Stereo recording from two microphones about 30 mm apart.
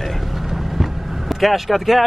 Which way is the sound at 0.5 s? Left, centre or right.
Centre.